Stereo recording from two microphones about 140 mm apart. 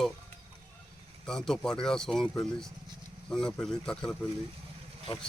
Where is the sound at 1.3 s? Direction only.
5° left (ahead or behind).